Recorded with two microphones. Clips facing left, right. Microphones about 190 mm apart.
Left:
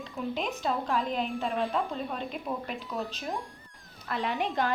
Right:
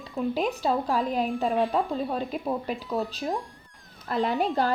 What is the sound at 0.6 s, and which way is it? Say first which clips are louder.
Speech: right 2 dB; 40° right (ahead or behind).